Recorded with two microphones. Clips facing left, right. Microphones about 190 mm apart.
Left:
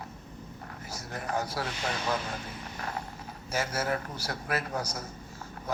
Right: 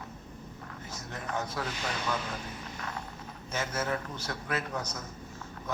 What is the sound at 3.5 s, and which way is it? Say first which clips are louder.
Speech: left 2 dB; 35° left (ahead or behind).